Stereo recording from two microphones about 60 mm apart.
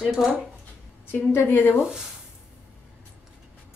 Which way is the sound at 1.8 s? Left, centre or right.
Centre.